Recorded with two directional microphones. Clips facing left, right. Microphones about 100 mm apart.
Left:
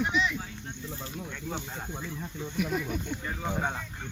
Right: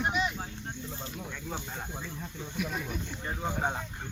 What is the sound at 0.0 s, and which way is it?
Snake, 45° right (ahead or behind).